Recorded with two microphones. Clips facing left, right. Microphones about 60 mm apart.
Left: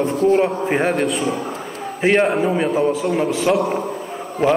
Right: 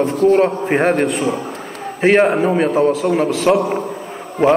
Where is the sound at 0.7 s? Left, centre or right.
Centre.